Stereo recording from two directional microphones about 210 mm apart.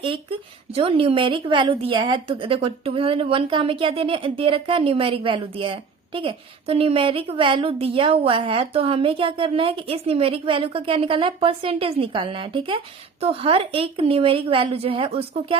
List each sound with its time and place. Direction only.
0.0 s a woman's voice: 25° right (ahead or behind)